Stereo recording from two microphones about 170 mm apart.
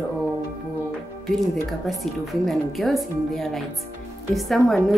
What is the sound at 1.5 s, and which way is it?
A woman's voice, centre (ahead or behind).